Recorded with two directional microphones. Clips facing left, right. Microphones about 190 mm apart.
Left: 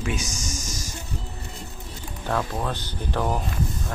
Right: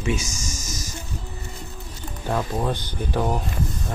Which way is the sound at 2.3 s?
15° right (ahead or behind).